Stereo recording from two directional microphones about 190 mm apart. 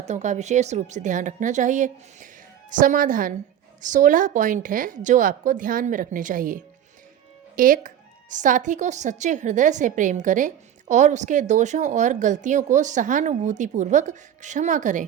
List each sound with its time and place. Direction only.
0.0 s a woman's voice: 40° right (ahead or behind)